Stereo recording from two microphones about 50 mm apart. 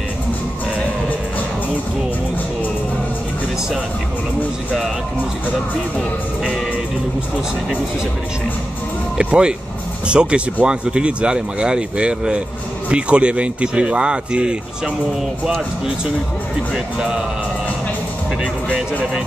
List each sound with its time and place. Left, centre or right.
9.2 s speech: centre
16.7 s speech: centre